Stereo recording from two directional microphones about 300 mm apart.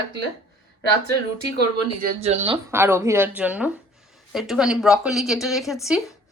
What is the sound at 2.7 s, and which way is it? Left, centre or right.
A woman's voice, centre.